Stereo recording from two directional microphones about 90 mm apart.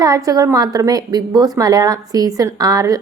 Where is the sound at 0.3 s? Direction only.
40° right (ahead or behind).